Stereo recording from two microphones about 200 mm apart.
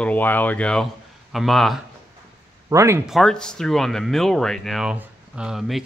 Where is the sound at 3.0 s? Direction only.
Centre (ahead or behind).